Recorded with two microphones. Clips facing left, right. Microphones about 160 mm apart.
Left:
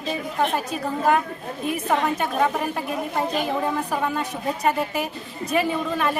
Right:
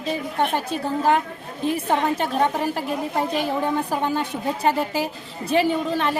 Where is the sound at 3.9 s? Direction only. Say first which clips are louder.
Right 2 dB; 30° right (ahead or behind).